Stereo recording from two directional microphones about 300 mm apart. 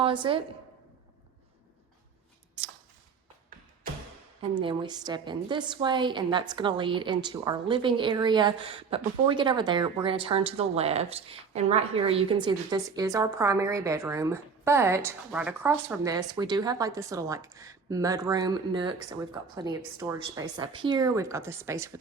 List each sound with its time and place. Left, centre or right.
0.0 s a woman's voice: centre
4.5 s a woman's voice: centre